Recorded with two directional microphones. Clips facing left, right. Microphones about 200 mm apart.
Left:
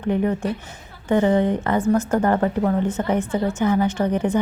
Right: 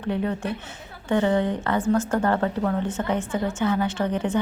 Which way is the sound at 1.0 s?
15° left (ahead or behind).